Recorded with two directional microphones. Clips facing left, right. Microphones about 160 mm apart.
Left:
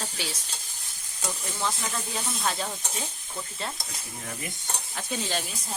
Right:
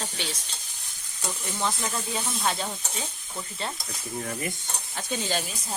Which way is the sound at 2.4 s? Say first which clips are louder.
Right 1 dB; centre (ahead or behind).